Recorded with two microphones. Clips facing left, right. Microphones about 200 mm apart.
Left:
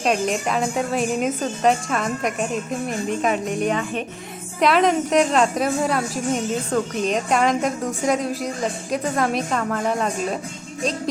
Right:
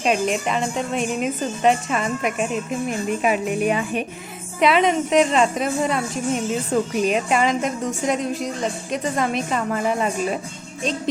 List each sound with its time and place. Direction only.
0.0 s a woman's voice: centre (ahead or behind)